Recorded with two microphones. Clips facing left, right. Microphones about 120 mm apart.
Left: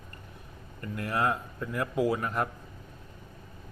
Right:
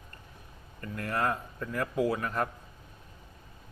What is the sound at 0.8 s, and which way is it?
A man's voice, 25° left (ahead or behind).